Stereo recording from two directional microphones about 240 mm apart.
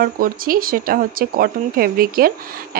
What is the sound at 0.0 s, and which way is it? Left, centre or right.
Speech, right.